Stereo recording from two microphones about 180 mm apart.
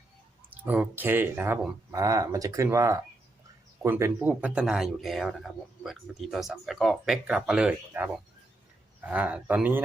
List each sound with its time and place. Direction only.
0.5 s speech: 10° right (ahead or behind)